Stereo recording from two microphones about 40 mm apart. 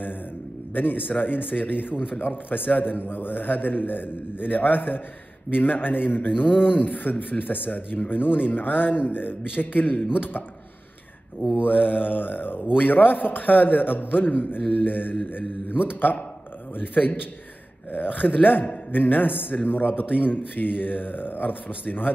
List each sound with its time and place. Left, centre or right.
0.7 s a man's voice: left
11.6 s a man's voice: left
18.2 s a man's voice: left